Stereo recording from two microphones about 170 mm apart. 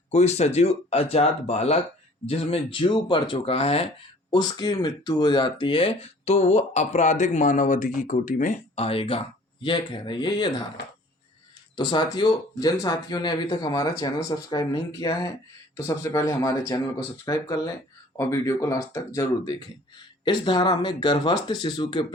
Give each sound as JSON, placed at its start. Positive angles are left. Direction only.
{"t": 0.1, "sound": "speech", "side_deg": 40}
{"t": 11.8, "sound": "speech", "side_deg": 30}